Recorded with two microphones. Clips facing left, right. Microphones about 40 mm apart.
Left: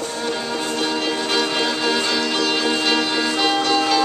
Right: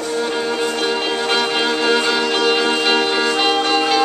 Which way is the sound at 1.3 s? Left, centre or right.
Centre.